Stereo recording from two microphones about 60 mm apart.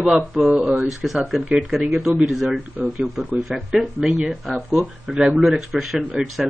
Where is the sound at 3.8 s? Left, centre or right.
Centre.